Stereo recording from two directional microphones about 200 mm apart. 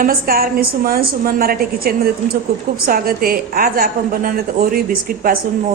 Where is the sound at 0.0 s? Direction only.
45° right (ahead or behind).